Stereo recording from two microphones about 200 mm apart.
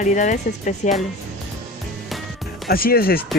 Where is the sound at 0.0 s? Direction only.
40° left (ahead or behind).